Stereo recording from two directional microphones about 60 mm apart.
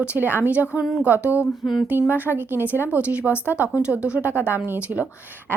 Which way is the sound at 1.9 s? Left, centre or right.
Right.